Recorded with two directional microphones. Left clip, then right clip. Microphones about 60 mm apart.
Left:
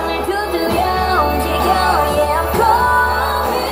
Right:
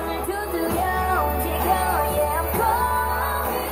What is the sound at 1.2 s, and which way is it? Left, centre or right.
Music, right.